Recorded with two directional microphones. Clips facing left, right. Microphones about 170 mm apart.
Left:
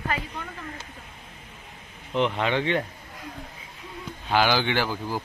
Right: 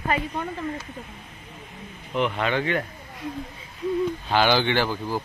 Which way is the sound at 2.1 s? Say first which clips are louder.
Even; 25° left (ahead or behind).